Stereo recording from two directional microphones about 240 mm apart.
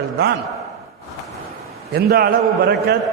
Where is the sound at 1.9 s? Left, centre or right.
Right.